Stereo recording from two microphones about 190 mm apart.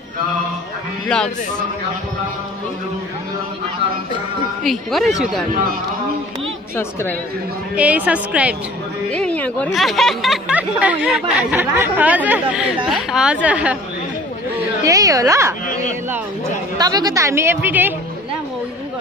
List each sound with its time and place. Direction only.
1.0 s speech: 5° left (ahead or behind)
4.6 s speech: centre (ahead or behind)
6.8 s a woman's voice: 15° left (ahead or behind)
7.7 s a woman's voice: 5° right (ahead or behind)
9.1 s speech: 5° left (ahead or behind)
14.8 s a woman's voice: 20° right (ahead or behind)